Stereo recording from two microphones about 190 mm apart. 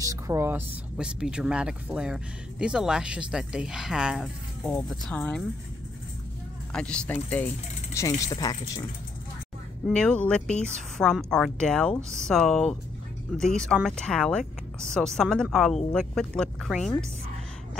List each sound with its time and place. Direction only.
0.0 s speech: 15° right (ahead or behind); by 5.4 s 5° left (ahead or behind)
6.7 s speech: 5° left (ahead or behind)
9.8 s speech: 5° left (ahead or behind)